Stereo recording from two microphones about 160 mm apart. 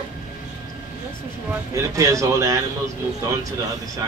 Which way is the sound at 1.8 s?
20° right (ahead or behind).